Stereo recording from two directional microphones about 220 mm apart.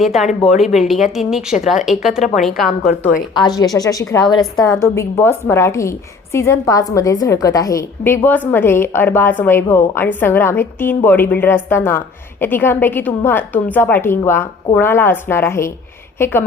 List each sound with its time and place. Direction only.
0.0 s a woman's voice: centre (ahead or behind)
3.3 s a woman's voice: 20° left (ahead or behind)